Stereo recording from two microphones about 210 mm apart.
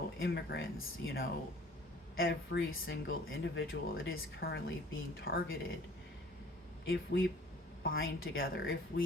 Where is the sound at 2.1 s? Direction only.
45° left (ahead or behind).